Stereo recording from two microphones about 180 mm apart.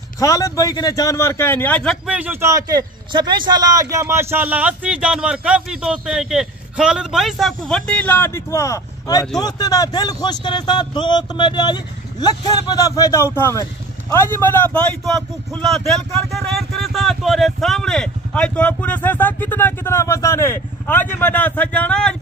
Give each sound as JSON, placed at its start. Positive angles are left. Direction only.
{"t": 0.2, "sound": "speech", "side_deg": 20}
{"t": 2.0, "sound": "a man's voice", "side_deg": -10}